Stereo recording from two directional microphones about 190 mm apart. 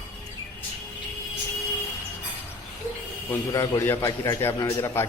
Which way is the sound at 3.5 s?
15° left (ahead or behind).